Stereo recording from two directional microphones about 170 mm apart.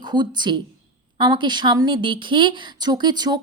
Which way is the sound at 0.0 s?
25° right (ahead or behind).